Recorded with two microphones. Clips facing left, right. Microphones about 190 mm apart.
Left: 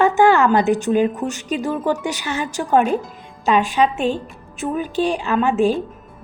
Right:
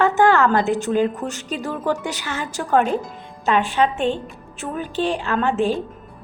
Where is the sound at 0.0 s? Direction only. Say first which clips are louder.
Left 2 dB; 15° left (ahead or behind).